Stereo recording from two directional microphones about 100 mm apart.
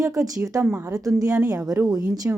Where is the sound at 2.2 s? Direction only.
25° right (ahead or behind).